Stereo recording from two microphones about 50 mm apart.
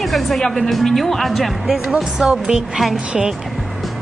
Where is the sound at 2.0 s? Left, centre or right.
Centre.